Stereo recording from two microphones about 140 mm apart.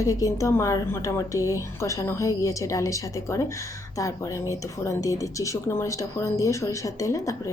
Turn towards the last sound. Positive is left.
turn(degrees=20)  # may be behind; listen again after turning